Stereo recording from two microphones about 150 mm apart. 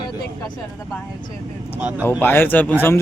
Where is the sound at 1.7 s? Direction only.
10° right (ahead or behind).